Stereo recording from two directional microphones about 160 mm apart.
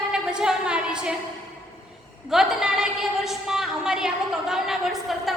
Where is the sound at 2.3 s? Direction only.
5° right (ahead or behind).